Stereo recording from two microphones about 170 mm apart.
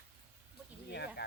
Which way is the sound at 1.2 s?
75° left (ahead or behind).